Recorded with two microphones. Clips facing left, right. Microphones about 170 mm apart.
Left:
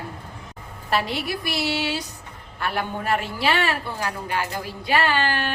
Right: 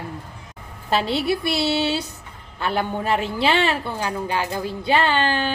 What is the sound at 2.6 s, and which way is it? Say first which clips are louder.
A man's voice: right 3 dB; 25° right (ahead or behind).